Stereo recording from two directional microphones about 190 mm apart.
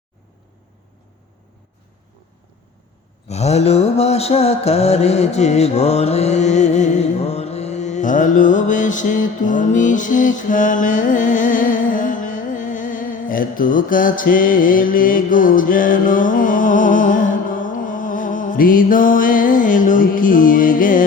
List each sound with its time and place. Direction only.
3.2 s mantra: 35° left (ahead or behind)